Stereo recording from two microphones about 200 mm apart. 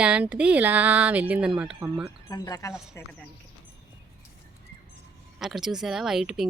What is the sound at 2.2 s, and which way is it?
Speech, 15° left (ahead or behind).